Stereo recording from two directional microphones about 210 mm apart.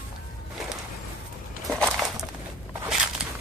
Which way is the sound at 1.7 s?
5° left (ahead or behind).